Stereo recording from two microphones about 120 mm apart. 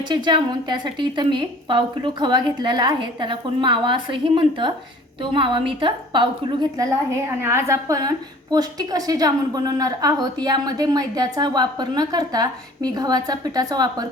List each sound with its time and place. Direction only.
0.1 s a woman's voice: 40° right (ahead or behind)
7.4 s a woman's voice: 25° right (ahead or behind)